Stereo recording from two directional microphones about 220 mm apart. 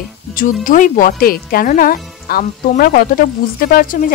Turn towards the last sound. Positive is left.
turn(degrees=40)  # may be behind; listen again after turning